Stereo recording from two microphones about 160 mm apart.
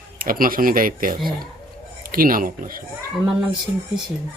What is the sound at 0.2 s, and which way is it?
Speech, 65° right (ahead or behind).